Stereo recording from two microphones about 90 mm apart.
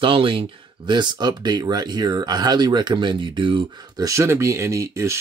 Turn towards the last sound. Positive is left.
turn(degrees=-30)  # may be behind; listen again after turning